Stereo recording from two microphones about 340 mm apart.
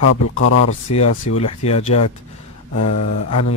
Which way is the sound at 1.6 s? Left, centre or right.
Centre.